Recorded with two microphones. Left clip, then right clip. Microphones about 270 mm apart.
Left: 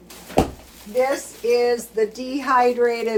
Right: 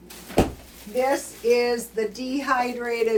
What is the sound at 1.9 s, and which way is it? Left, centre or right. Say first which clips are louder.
Speech: left 4 dB; centre.